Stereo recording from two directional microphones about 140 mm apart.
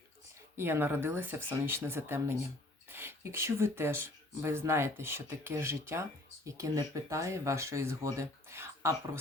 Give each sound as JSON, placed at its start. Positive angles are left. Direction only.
{"t": 0.5, "sound": "speech", "side_deg": -15}